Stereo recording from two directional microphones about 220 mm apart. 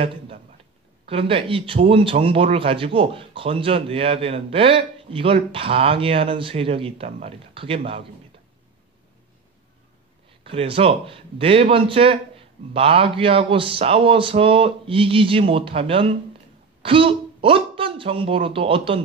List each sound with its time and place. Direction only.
0.0 s a sound: 25° right (ahead or behind)
1.0 s speech: 25° right (ahead or behind)
10.4 s speech: 25° right (ahead or behind)